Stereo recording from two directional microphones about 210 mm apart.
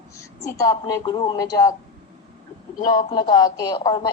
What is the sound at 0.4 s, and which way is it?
A woman's voice, 15° left (ahead or behind).